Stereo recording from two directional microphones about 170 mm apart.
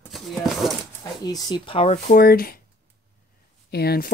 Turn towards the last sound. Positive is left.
turn(degrees=65)  # may be behind; listen again after turning